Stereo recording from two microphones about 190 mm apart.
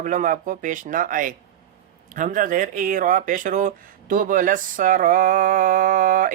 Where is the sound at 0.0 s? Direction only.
45° right (ahead or behind).